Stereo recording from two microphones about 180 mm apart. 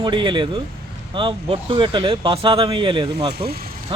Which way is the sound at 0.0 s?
25° right (ahead or behind).